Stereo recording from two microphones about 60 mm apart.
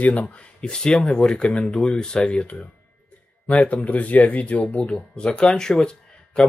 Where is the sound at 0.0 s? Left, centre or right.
Left.